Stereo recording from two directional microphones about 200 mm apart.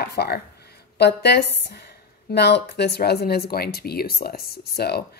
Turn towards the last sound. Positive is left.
turn(degrees=55)  # may be behind; listen again after turning